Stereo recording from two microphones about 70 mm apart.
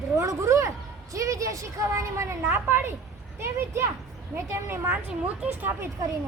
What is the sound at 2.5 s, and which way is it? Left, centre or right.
A woman's voice, right.